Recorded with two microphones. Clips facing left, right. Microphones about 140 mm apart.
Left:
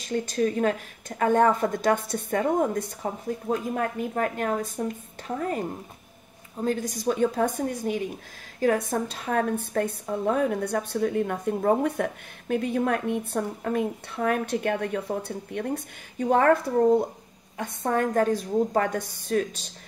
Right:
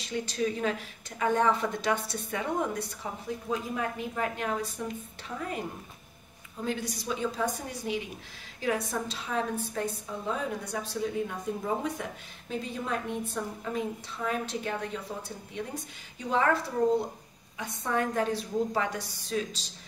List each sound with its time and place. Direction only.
0.0 s a woman's voice: 45° left (ahead or behind)